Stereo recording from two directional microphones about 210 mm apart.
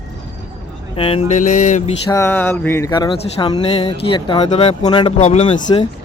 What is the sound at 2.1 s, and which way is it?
Speech, 15° left (ahead or behind).